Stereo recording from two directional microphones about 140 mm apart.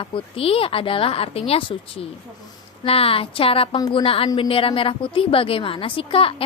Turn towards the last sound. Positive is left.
turn(degrees=40)  # may be behind; listen again after turning